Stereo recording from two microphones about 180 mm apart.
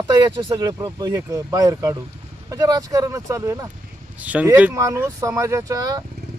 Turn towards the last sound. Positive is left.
turn(degrees=-20)  # may be behind; listen again after turning